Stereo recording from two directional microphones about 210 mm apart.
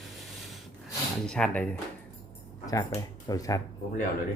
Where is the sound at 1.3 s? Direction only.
5° left (ahead or behind).